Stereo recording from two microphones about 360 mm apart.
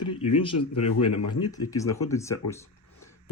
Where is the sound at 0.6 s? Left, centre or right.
Left.